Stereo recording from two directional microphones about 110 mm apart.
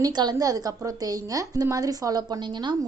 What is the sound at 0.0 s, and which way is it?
A woman's voice, 40° right (ahead or behind).